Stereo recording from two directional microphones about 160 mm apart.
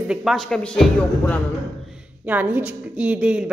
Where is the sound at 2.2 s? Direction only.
10° right (ahead or behind).